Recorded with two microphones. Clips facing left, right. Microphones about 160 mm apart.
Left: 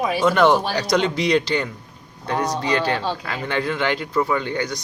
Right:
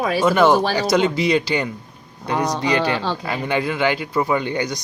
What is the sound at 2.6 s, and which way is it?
Speech, 90° right.